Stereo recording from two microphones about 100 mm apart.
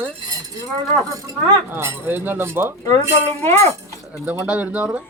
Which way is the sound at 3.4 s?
30° left (ahead or behind).